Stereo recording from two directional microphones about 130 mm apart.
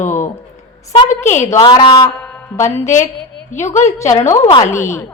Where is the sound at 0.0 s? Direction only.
70° left (ahead or behind).